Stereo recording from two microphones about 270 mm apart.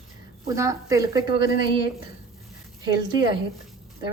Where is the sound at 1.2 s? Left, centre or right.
Left.